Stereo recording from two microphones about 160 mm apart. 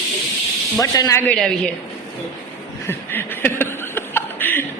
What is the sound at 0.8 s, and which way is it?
Speech, 20° left (ahead or behind).